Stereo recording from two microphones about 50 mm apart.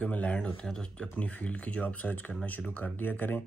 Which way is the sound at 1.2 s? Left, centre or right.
Left.